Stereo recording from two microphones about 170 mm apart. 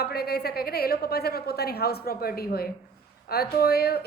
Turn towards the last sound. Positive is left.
turn(degrees=70)  # may be behind; listen again after turning